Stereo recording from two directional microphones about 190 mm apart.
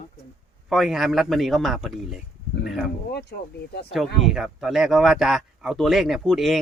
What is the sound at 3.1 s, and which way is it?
Speech, 60° left (ahead or behind).